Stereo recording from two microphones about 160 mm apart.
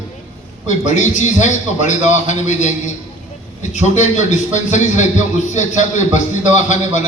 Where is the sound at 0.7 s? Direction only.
50° left (ahead or behind).